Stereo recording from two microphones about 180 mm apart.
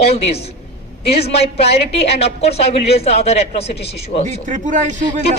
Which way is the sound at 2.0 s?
35° left (ahead or behind).